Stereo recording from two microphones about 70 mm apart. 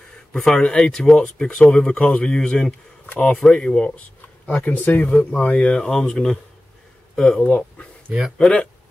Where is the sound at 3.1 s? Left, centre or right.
Left.